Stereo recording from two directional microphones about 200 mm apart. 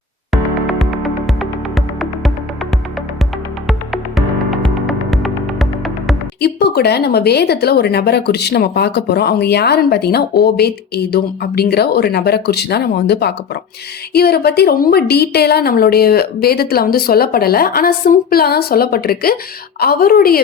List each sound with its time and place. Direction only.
0.3 s music: centre (ahead or behind)
3.7 s music: centre (ahead or behind)
6.4 s speech: 55° left (ahead or behind)